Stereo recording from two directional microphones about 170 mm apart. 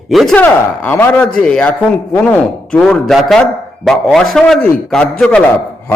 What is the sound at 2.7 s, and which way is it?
A man's voice, 5° left (ahead or behind).